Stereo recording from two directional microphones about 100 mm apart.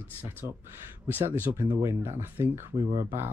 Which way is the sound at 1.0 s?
20° right (ahead or behind).